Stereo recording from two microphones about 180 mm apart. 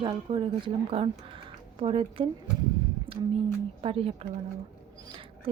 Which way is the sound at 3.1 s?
30° right (ahead or behind).